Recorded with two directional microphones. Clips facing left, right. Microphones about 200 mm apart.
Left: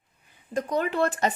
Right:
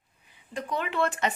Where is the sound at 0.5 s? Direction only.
40° left (ahead or behind).